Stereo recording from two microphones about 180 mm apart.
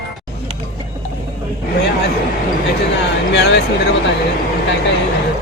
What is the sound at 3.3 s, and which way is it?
Speech, 70° left (ahead or behind).